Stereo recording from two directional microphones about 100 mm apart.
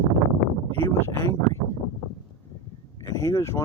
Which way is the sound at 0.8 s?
25° left (ahead or behind).